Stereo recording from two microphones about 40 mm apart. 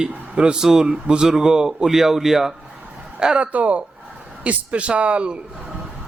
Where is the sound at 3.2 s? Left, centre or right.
Right.